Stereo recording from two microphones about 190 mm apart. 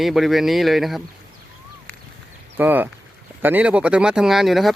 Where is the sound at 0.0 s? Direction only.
Centre (ahead or behind).